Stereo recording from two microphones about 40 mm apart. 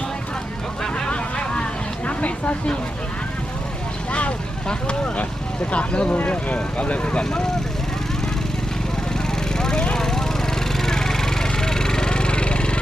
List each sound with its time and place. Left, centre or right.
0.8 s vehicle: left
2.0 s speech: left
4.7 s speech: left
9.6 s a sound: centre
10.0 s vehicle: centre